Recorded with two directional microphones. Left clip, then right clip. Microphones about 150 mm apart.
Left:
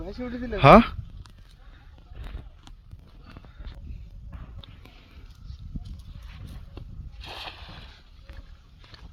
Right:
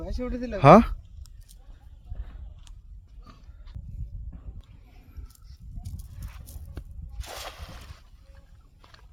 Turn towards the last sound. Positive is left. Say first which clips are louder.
# left 1 dB
turn(degrees=-55)  # may be behind; listen again after turning